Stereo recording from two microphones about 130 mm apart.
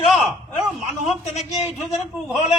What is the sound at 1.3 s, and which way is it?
Speech, 60° left (ahead or behind).